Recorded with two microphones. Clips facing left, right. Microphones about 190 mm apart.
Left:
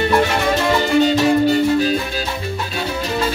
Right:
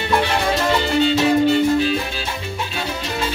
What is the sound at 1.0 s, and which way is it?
Music, 40° left (ahead or behind).